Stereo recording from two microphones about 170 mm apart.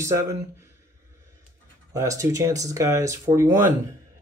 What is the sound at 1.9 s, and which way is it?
Speech, 20° right (ahead or behind).